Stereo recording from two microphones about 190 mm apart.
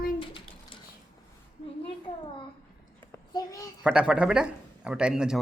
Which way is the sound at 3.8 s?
5° right (ahead or behind).